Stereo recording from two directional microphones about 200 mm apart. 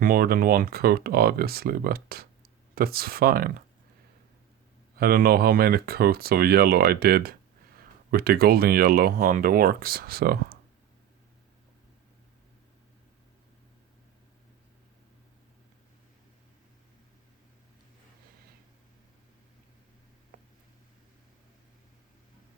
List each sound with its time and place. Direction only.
0.0 s speech: 45° right (ahead or behind)
4.9 s speech: 50° right (ahead or behind)